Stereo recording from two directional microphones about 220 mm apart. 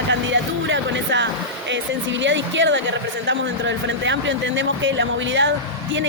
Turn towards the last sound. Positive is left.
turn(degrees=-55)  # may be behind; listen again after turning